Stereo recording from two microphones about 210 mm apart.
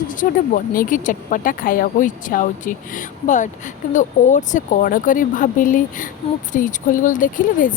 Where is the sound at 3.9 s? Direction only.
35° left (ahead or behind).